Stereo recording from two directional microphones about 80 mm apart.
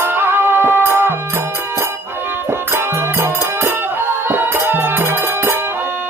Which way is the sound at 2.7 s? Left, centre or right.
Right.